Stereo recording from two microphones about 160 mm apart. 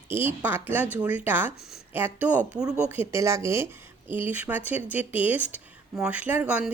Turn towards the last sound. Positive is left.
turn(degrees=-5)  # may be behind; listen again after turning